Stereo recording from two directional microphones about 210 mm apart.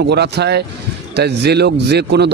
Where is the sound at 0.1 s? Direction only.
50° right (ahead or behind).